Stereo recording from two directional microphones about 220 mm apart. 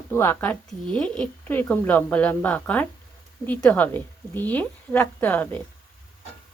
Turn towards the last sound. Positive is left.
turn(degrees=10)  # may be behind; listen again after turning